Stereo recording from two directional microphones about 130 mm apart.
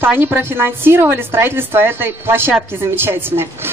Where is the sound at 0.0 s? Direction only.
15° right (ahead or behind).